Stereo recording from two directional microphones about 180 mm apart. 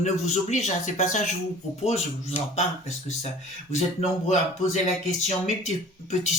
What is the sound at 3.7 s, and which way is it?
Speech, 40° left (ahead or behind).